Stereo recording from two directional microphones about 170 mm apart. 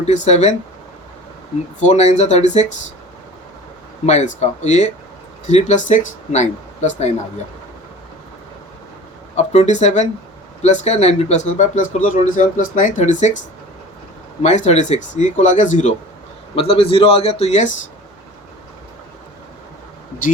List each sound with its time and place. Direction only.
0.0 s a man's voice: 40° left (ahead or behind)
1.8 s speech: 40° left (ahead or behind)
4.0 s a man's voice: 40° left (ahead or behind)
9.3 s speech: 40° left (ahead or behind)
14.4 s speech: 40° left (ahead or behind)
16.6 s a man's voice: 35° left (ahead or behind)